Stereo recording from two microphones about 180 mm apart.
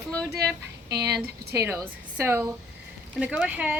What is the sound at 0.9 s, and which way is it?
Speech, 65° right (ahead or behind).